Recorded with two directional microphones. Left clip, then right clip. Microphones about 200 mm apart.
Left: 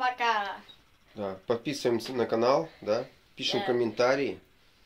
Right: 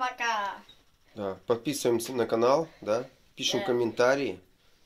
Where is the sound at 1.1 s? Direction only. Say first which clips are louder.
Right 1 dB; 15° right (ahead or behind).